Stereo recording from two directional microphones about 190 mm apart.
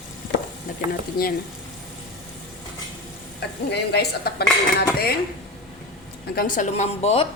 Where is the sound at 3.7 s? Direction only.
55° left (ahead or behind).